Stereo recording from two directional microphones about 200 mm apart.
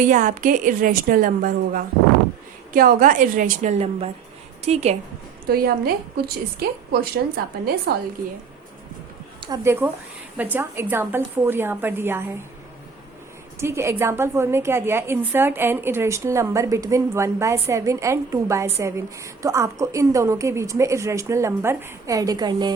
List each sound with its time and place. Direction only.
0.0 s a woman's voice: 40° right (ahead or behind)
5.5 s a woman's voice: 50° right (ahead or behind)
9.4 s a woman's voice: 15° right (ahead or behind)
13.6 s a woman's voice: 15° right (ahead or behind)